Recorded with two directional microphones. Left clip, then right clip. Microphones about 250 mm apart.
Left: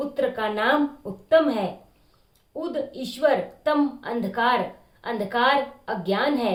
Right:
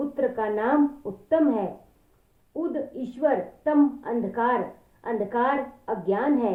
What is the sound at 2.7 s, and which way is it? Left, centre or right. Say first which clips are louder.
A woman's voice: left 2 dB; centre.